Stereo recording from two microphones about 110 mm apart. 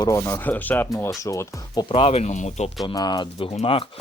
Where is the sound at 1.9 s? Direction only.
60° left (ahead or behind); by 2.6 s 90° left.